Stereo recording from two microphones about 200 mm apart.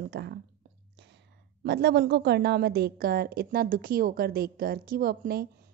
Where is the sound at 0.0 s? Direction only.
55° right (ahead or behind).